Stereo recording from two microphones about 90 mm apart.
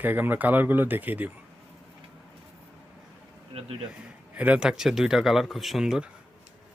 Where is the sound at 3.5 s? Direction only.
90° right.